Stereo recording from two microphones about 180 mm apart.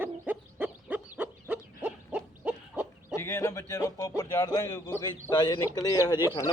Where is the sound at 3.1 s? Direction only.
15° left (ahead or behind).